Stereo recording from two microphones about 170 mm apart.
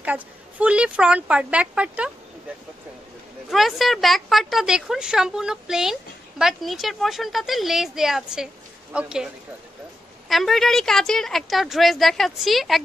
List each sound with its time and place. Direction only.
0.0 s speech: 10° right (ahead or behind)
3.4 s a woman's voice: centre (ahead or behind)